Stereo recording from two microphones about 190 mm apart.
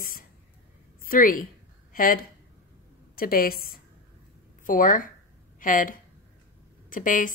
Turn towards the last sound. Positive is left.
turn(degrees=45)  # may be behind; listen again after turning